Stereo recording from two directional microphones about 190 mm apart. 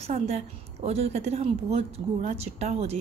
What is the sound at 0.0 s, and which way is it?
A woman's voice, 35° right (ahead or behind).